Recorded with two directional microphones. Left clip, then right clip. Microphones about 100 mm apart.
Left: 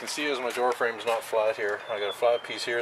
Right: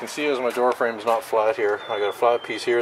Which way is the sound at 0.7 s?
15° left (ahead or behind).